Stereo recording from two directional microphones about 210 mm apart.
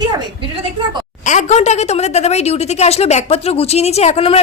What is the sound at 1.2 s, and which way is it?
A woman's voice, 35° left (ahead or behind).